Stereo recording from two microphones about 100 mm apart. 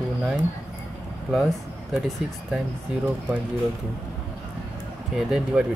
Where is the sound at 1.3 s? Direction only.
Centre (ahead or behind).